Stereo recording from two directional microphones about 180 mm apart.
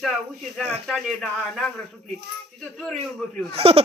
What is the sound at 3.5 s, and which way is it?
Speech, 35° right (ahead or behind).